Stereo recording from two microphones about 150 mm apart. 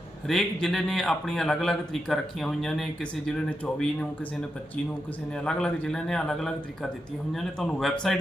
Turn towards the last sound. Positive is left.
turn(degrees=5)  # may be behind; listen again after turning